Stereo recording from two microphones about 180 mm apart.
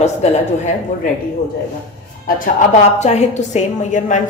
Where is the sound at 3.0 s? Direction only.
40° left (ahead or behind).